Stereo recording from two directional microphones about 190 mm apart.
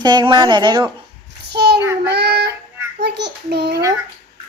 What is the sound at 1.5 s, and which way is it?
Child singing, 60° right (ahead or behind).